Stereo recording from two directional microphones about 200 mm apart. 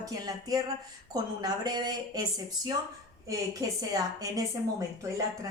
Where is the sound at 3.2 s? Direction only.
15° right (ahead or behind).